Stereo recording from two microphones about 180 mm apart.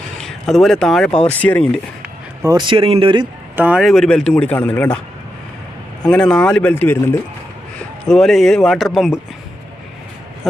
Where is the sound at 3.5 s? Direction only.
10° right (ahead or behind); by 5.0 s 10° left (ahead or behind).